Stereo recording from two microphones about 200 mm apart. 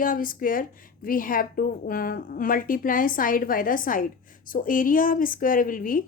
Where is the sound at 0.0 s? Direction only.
45° left (ahead or behind).